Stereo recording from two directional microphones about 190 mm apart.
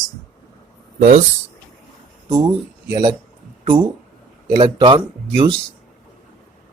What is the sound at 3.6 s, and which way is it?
Speech, 25° right (ahead or behind).